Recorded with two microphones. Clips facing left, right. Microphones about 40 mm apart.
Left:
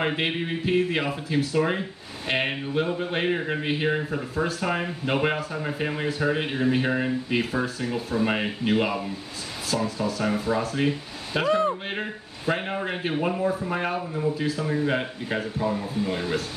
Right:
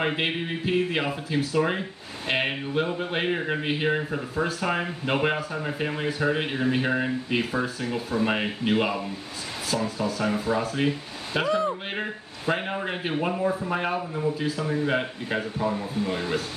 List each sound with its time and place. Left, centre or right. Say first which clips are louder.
0.0 s speech: even; centre
11.4 s speech: left 3 dB; left
11.9 s speech: even; centre